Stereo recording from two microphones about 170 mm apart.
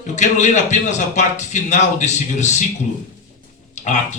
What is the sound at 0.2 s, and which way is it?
Speech, 45° left (ahead or behind).